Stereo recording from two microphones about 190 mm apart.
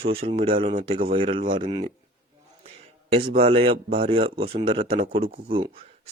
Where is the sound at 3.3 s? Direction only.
30° right (ahead or behind).